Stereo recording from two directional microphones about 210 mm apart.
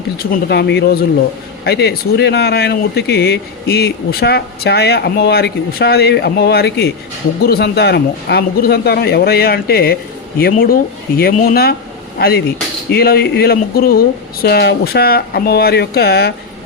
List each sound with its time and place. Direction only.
0.2 s speech: 50° left (ahead or behind)
12.9 s speech: 50° left (ahead or behind)